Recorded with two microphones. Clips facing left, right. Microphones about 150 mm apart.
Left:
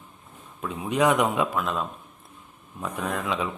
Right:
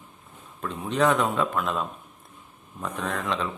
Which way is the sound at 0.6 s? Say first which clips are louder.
Left 1 dB; 10° left (ahead or behind).